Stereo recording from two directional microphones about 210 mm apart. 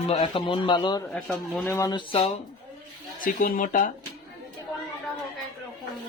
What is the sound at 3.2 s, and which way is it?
Speech, 40° left (ahead or behind).